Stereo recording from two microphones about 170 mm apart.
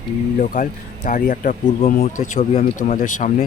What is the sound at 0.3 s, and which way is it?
Speech, 55° left (ahead or behind).